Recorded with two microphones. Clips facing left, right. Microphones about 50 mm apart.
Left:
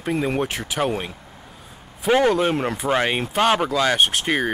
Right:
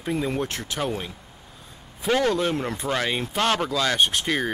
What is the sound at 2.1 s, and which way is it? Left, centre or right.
Speech, left.